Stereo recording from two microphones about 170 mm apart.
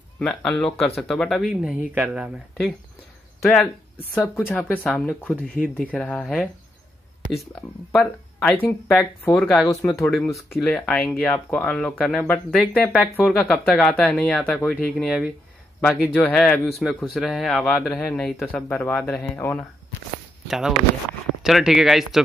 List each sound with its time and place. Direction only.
0.2 s speech: 5° left (ahead or behind)
7.9 s speech: 5° left (ahead or behind)
9.7 s speech: 20° left (ahead or behind)
10.3 s speech: 5° left (ahead or behind)
15.0 s speech: 5° right (ahead or behind)
15.8 s speech: 10° left (ahead or behind)
20.4 s speech: centre (ahead or behind)